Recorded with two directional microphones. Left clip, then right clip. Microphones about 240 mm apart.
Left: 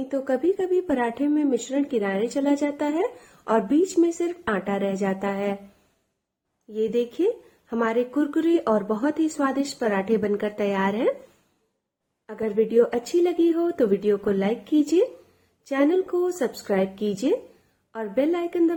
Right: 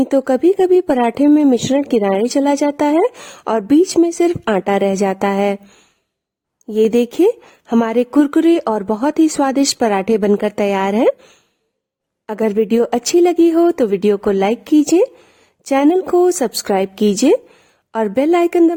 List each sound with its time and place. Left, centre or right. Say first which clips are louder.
0.1 s speech: right 7 dB; right
6.7 s speech: right 10 dB; right
12.2 s speech: right 8 dB; right